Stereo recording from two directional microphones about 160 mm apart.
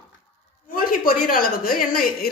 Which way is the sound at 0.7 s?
60° left (ahead or behind).